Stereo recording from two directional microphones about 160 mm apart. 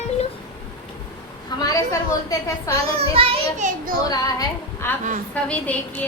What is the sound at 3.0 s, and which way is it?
Speech, 40° right (ahead or behind).